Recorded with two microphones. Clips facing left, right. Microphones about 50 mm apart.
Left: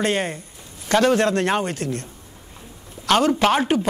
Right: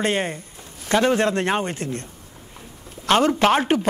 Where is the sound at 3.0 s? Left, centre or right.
Right.